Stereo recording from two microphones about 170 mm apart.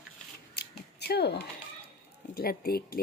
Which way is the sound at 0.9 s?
75° left (ahead or behind).